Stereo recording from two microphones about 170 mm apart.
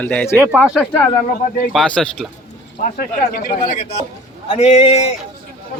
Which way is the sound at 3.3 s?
60° left (ahead or behind).